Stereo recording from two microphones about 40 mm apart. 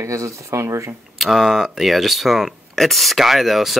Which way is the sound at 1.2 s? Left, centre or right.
Centre.